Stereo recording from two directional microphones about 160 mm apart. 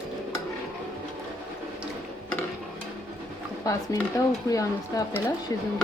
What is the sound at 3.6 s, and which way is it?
Speech, 20° left (ahead or behind).